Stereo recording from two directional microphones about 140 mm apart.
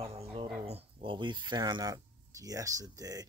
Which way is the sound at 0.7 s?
45° right (ahead or behind).